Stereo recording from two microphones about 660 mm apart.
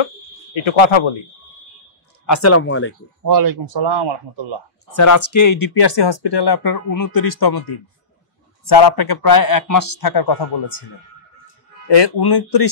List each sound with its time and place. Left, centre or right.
0.6 s speech: left
2.2 s speech: left
3.2 s speech: right
4.9 s speech: left
11.9 s speech: left